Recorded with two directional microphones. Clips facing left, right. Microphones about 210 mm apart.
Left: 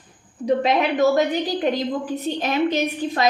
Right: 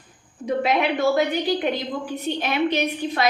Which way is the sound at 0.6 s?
40° left (ahead or behind).